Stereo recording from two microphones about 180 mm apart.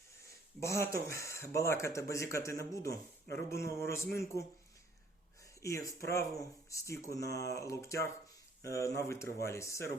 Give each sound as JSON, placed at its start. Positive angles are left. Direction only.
{"t": 0.6, "sound": "a man's voice", "side_deg": 15}
{"t": 5.6, "sound": "a man's voice", "side_deg": 15}